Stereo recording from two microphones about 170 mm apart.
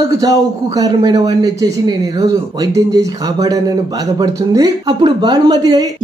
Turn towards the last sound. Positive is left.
turn(degrees=-25)  # may be behind; listen again after turning